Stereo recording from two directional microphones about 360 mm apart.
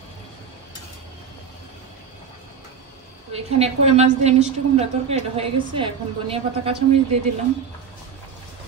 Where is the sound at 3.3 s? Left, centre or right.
Centre.